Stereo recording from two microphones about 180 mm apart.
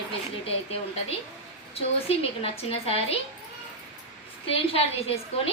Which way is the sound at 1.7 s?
35° left (ahead or behind).